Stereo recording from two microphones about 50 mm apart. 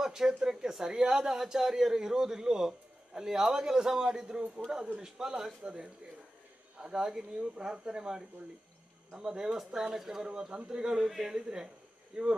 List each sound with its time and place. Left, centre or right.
0.0 s speech: centre